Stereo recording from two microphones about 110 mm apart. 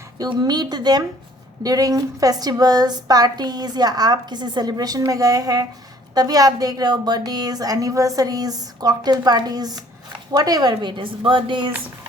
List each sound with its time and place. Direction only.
0.2 s a woman's voice: 40° right (ahead or behind)